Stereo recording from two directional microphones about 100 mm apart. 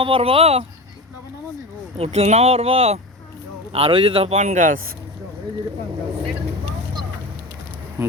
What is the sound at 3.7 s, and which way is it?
Speech, 70° right (ahead or behind).